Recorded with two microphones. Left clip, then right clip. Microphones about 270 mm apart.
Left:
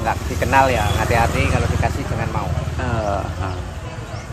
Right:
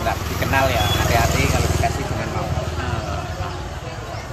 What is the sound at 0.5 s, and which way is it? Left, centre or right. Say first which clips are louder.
Speech: left 3 dB; centre.